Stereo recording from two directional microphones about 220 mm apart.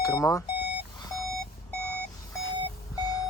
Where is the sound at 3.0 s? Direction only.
15° left (ahead or behind).